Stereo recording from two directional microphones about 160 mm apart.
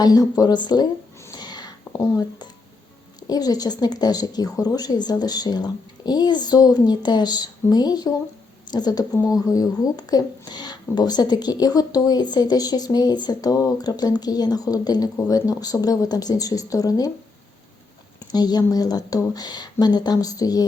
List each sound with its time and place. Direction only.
0.0 s speech: 25° left (ahead or behind)
1.4 s a sound: 25° left (ahead or behind)
3.2 s speech: 25° left (ahead or behind)
18.3 s speech: 25° left (ahead or behind)